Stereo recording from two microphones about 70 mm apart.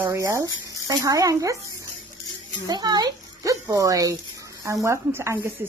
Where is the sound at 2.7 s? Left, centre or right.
Right.